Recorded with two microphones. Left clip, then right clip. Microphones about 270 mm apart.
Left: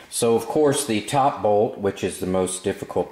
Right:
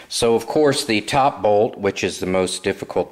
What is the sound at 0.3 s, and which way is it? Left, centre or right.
Speech, centre.